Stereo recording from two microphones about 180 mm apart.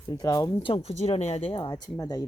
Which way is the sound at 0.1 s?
20° left (ahead or behind).